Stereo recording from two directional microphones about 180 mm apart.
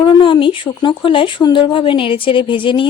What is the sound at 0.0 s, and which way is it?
Speech, 25° left (ahead or behind).